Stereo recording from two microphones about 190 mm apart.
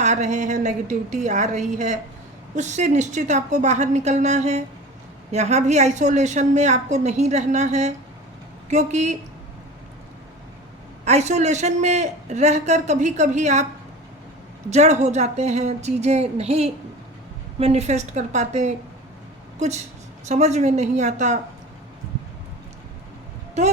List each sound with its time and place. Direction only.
0.0 s a woman's voice: 40° right (ahead or behind)
11.0 s a woman's voice: 35° right (ahead or behind)
14.7 s a woman's voice: 35° right (ahead or behind)